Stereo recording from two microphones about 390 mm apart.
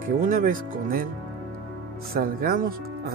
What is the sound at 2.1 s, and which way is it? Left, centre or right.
Speech, right.